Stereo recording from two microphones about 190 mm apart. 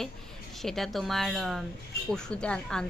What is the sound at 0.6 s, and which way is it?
A woman's voice, centre (ahead or behind).